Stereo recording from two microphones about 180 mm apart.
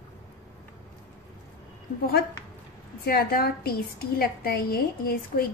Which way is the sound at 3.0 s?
55° left (ahead or behind).